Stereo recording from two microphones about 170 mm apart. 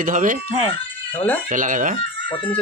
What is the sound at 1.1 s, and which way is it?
Speech, 10° left (ahead or behind).